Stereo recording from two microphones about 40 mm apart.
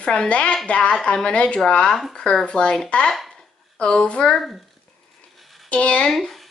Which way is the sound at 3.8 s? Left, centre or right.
Left.